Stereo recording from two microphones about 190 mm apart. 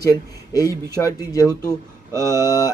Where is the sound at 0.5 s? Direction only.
20° left (ahead or behind).